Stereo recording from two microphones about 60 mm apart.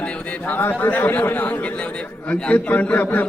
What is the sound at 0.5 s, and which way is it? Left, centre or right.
Speech, left.